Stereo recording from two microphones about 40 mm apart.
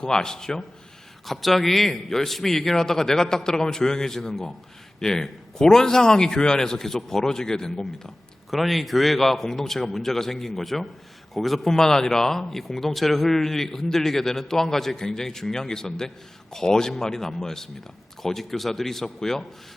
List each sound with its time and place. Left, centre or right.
0.0 s speech: centre
1.2 s speech: centre
8.4 s speech: centre